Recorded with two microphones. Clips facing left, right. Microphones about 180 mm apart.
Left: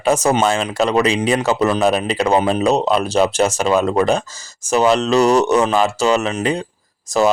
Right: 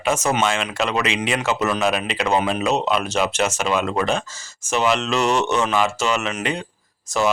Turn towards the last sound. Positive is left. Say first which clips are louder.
# left 5 dB
turn(degrees=35)  # may be behind; listen again after turning